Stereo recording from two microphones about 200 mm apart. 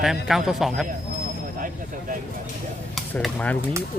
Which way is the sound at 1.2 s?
45° right (ahead or behind).